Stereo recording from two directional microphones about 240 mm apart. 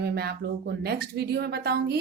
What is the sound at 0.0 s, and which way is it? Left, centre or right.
A woman's voice, right.